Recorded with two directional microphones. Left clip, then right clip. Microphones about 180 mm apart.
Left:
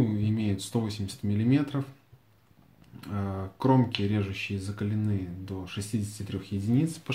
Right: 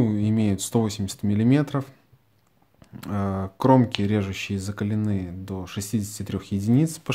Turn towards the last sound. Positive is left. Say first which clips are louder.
# right 6 dB
turn(degrees=-45)  # may be behind; listen again after turning